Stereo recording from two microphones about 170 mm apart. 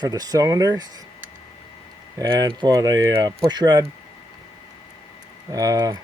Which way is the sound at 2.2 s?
20° right (ahead or behind).